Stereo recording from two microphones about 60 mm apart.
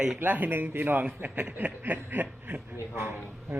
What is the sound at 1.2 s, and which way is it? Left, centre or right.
Snicker, right.